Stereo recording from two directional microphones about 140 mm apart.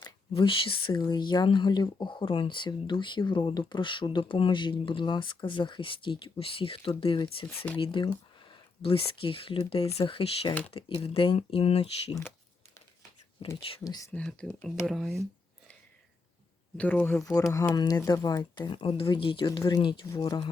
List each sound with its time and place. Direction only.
0.0 s speech: 40° left (ahead or behind)
7.5 s speech: 10° left (ahead or behind)
7.8 s speech: 35° left (ahead or behind)
13.4 s speech: 35° left (ahead or behind)
14.1 s speech: 5° left (ahead or behind)
16.7 s speech: 10° left (ahead or behind); by 20.5 s 30° left (ahead or behind)